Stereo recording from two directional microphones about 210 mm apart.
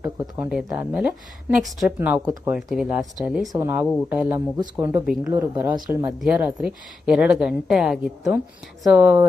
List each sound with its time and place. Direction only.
0.2 s a woman's voice: 10° right (ahead or behind)
2.5 s a woman's voice: centre (ahead or behind)